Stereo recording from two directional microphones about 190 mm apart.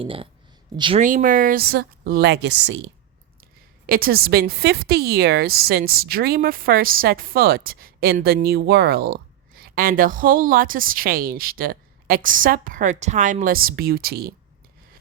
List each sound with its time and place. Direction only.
0.0 s speech: 30° right (ahead or behind)
1.0 s speech: 45° right (ahead or behind); by 2.9 s 65° right (ahead or behind)
3.8 s a woman's voice: 50° right (ahead or behind)